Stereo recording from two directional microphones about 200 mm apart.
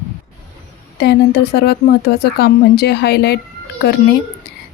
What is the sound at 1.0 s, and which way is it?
A woman's voice, 55° left (ahead or behind).